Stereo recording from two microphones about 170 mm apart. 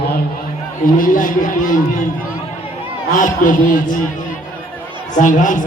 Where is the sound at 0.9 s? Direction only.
55° left (ahead or behind).